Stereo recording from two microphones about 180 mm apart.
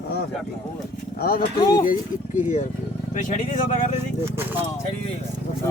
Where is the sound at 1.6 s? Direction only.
20° left (ahead or behind).